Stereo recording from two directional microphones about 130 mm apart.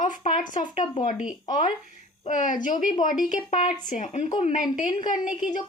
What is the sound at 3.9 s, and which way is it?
A woman's voice, 65° left (ahead or behind).